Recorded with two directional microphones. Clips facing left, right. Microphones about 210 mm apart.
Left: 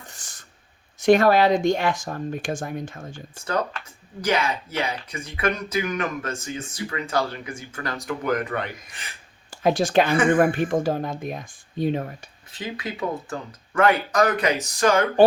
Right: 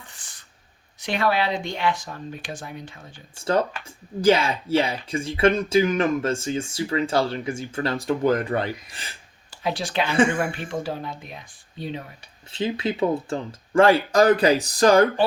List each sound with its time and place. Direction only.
0.1 s a sound: 45° left (ahead or behind)
0.9 s speech: 45° left (ahead or behind)
4.2 s speech: 30° right (ahead or behind)
9.6 s speech: 50° left (ahead or behind)
12.5 s speech: 25° right (ahead or behind)